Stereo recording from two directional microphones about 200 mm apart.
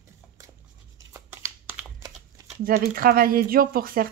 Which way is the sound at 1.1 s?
15° right (ahead or behind).